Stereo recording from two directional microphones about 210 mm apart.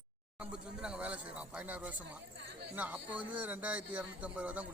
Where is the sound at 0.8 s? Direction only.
5° right (ahead or behind).